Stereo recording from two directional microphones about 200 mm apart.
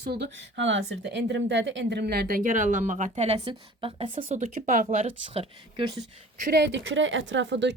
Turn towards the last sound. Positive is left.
turn(degrees=-60)  # may be behind; listen again after turning